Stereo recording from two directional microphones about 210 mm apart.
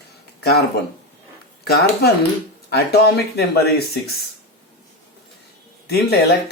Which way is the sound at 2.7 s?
50° left (ahead or behind).